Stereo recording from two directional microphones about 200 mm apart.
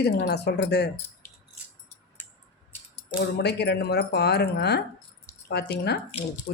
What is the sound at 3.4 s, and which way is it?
Speech, 55° left (ahead or behind).